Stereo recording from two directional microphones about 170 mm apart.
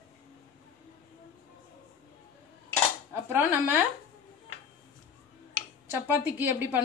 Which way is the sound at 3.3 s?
10° right (ahead or behind).